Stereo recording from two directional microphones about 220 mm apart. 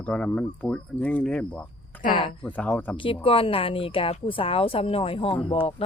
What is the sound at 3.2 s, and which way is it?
Speech, 25° left (ahead or behind).